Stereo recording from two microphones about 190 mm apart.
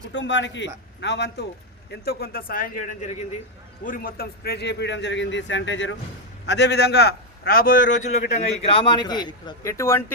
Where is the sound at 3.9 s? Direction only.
50° left (ahead or behind); by 5.9 s 75° left (ahead or behind).